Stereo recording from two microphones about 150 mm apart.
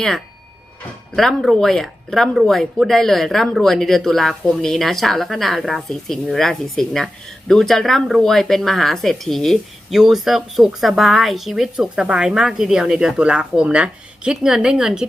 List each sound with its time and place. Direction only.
1.1 s speech: centre (ahead or behind)